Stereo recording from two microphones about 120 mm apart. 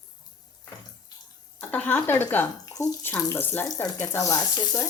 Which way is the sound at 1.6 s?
15° left (ahead or behind).